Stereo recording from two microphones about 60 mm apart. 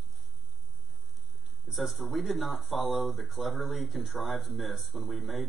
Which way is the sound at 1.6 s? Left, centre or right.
Centre.